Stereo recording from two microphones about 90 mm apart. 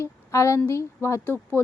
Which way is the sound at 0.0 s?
35° left (ahead or behind).